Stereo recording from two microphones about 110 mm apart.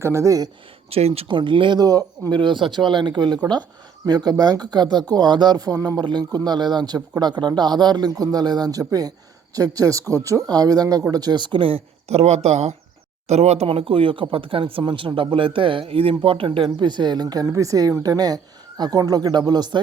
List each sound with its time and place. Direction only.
0.0 s speech: 25° right (ahead or behind)
0.9 s speech: 65° right (ahead or behind); by 19.8 s 40° right (ahead or behind)